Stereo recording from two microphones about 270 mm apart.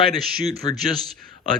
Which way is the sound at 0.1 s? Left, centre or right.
Centre.